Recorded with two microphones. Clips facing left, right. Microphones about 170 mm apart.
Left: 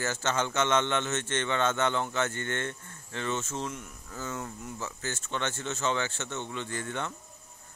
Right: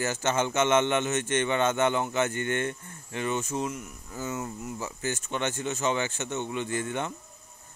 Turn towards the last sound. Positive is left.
turn(degrees=-15)  # may be behind; listen again after turning